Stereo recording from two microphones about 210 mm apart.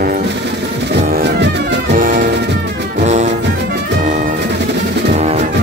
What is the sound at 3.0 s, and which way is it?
Music, 35° right (ahead or behind).